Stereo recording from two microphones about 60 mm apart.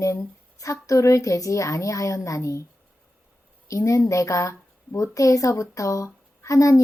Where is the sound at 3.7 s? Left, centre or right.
Left.